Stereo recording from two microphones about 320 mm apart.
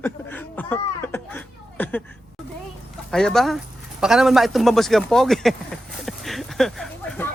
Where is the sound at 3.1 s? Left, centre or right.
Centre.